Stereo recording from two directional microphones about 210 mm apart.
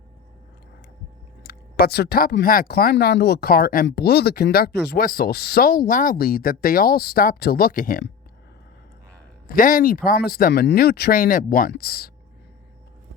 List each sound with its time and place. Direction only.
1.5 s speech: 50° left (ahead or behind)
9.5 s speech: 40° left (ahead or behind)